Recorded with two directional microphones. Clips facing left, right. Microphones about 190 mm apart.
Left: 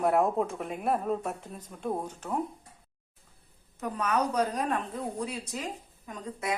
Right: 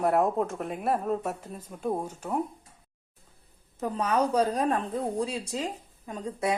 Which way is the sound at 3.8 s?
30° right (ahead or behind).